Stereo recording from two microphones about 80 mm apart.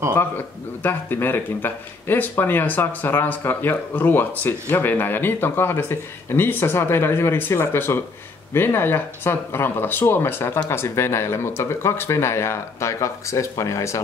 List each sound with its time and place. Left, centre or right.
0.8 s speech: left